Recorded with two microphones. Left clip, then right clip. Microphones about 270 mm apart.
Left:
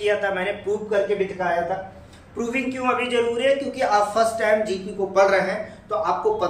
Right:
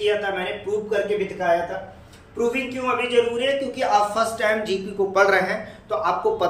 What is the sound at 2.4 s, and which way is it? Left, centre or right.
A man's voice, centre.